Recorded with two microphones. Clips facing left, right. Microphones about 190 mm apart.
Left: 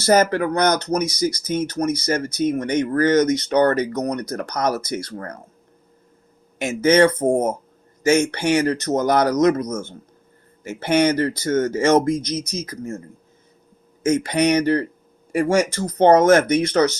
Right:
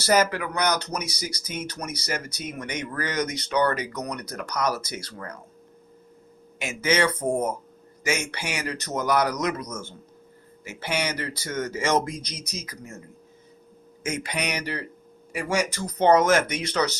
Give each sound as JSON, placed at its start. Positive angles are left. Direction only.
{"t": 0.0, "sound": "speech", "side_deg": 50}
{"t": 6.6, "sound": "speech", "side_deg": 50}
{"t": 14.1, "sound": "speech", "side_deg": 50}